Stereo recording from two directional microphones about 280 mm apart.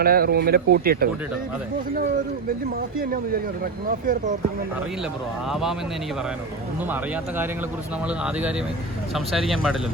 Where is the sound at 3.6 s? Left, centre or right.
Right.